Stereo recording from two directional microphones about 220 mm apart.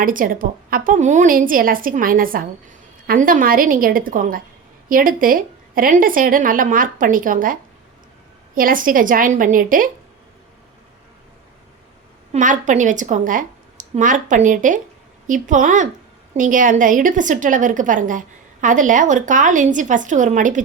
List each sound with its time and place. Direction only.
0.0 s a woman's voice: 40° right (ahead or behind)
12.3 s a woman's voice: 35° right (ahead or behind)